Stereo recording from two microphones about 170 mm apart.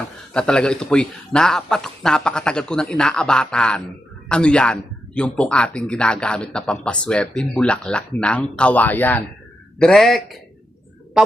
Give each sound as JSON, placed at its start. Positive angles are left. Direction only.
{"t": 0.3, "sound": "a man's voice", "side_deg": 5}